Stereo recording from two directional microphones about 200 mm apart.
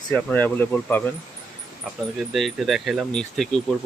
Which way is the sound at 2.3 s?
Centre (ahead or behind).